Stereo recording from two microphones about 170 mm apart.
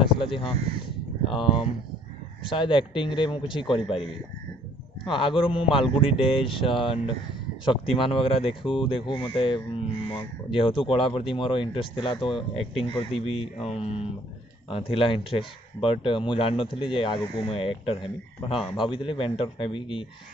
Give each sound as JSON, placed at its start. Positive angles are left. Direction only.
{"t": 0.0, "sound": "speech", "side_deg": 30}